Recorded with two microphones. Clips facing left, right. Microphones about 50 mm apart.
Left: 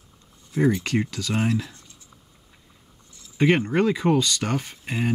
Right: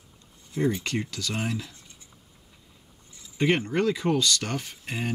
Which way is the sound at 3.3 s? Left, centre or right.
Left.